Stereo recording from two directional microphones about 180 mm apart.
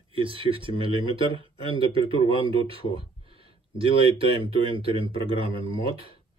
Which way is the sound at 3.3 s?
30° right (ahead or behind).